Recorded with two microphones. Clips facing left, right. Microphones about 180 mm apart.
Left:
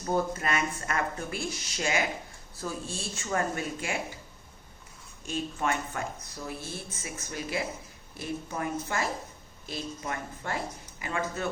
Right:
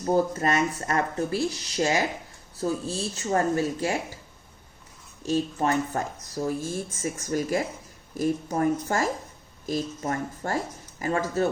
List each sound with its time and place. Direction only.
0.0 s speech: 35° right (ahead or behind)
5.2 s speech: 35° right (ahead or behind)